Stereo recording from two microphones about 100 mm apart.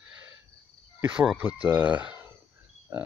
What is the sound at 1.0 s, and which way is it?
Cricket, 15° right (ahead or behind).